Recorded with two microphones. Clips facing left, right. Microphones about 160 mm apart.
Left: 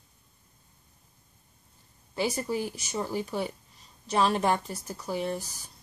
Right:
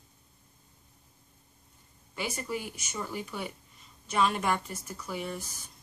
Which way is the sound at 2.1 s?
35° left (ahead or behind).